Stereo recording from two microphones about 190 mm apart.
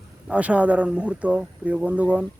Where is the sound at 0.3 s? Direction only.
5° right (ahead or behind).